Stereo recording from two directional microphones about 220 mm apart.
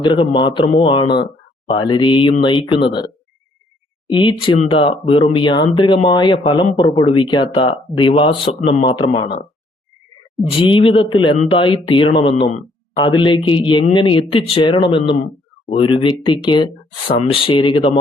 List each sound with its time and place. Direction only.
0.0 s speech: 20° left (ahead or behind)
4.1 s speech: 20° left (ahead or behind)
10.6 s speech: 25° left (ahead or behind)